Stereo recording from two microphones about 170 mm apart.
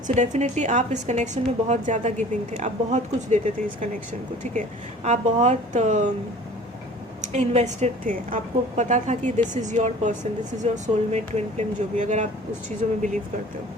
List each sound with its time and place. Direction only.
0.1 s a woman's voice: 45° right (ahead or behind)
7.3 s a woman's voice: 45° right (ahead or behind)